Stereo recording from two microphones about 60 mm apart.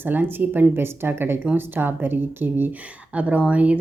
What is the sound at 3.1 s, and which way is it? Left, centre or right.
Speech, right.